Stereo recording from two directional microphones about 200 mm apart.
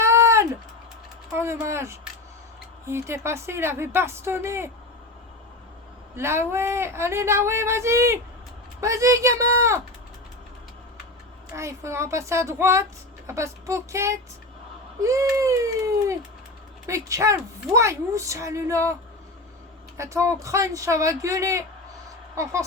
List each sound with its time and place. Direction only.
0.0 s a sound: 15° right (ahead or behind)
1.3 s a woman's voice: 15° right (ahead or behind)
6.1 s a woman's voice: 10° right (ahead or behind)
11.5 s a woman's voice: 15° right (ahead or behind)
20.0 s a woman's voice: 15° right (ahead or behind)